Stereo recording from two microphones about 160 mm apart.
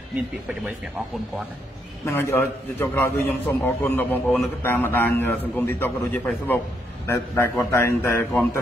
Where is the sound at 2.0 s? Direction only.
15° left (ahead or behind).